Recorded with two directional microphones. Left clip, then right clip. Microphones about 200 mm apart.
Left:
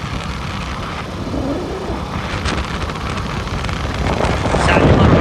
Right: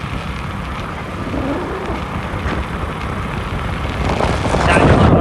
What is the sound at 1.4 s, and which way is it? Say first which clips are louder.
Vehicle: right 1 dB; centre (ahead or behind).